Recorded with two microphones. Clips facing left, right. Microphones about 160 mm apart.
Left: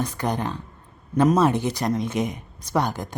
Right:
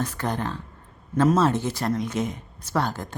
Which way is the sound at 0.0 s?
15° left (ahead or behind).